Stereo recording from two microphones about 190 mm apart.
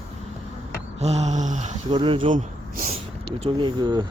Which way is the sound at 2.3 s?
40° right (ahead or behind).